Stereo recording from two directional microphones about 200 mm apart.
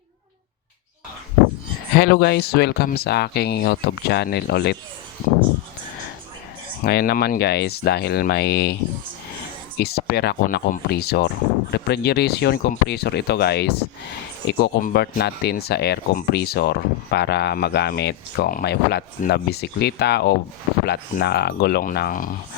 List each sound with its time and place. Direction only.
2.0 s speech: 55° left (ahead or behind)
6.8 s speech: 50° left (ahead or behind)
9.7 s speech: 50° left (ahead or behind)